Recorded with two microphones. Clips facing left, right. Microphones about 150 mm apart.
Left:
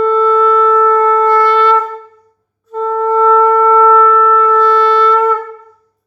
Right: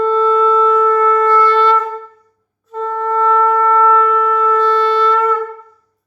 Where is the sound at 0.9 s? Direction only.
35° left (ahead or behind).